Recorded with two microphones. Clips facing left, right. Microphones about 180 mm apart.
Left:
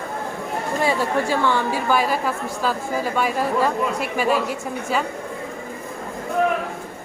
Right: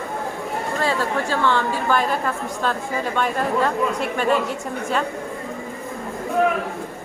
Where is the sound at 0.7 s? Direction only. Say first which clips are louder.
Left 2 dB; 15° left (ahead or behind).